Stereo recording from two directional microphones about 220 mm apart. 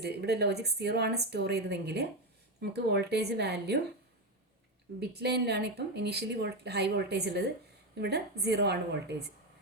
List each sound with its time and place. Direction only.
0.0 s speech: 50° right (ahead or behind)
4.9 s speech: 50° right (ahead or behind)